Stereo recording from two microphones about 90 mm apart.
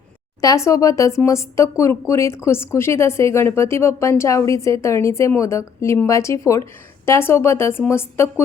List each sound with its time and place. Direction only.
0.4 s a woman's voice: 35° left (ahead or behind)